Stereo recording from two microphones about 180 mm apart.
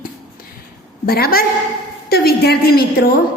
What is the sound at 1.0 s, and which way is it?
A woman's voice, 55° left (ahead or behind).